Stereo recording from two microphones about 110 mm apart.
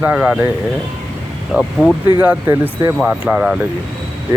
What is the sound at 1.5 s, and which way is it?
Mantra, 15° right (ahead or behind).